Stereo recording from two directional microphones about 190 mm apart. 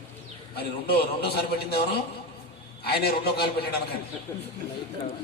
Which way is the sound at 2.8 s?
55° left (ahead or behind).